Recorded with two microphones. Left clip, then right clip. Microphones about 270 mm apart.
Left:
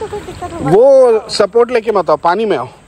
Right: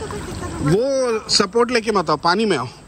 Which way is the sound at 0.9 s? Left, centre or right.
Centre.